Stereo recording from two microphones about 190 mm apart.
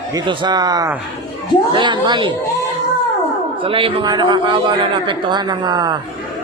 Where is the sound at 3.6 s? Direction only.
30° right (ahead or behind).